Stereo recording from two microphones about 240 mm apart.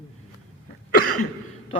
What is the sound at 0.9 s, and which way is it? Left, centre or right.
Cough, left.